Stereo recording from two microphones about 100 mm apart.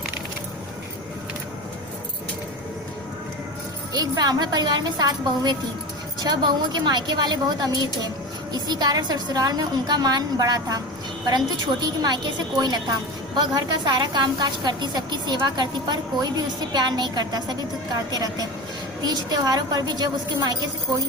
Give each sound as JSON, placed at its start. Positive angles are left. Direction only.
{"t": 3.9, "sound": "a woman's voice", "side_deg": -40}
{"t": 11.8, "sound": "a woman's voice", "side_deg": -45}